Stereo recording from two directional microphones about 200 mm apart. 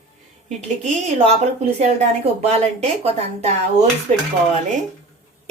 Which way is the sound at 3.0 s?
35° right (ahead or behind).